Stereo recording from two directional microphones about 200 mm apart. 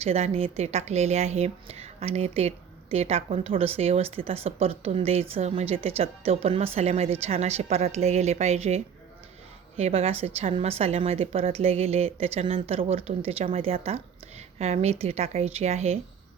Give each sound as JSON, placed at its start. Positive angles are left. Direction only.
{"t": 0.0, "sound": "a woman's voice", "side_deg": -30}